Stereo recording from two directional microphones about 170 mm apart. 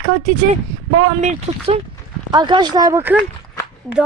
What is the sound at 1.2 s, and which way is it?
Speech, 40° right (ahead or behind).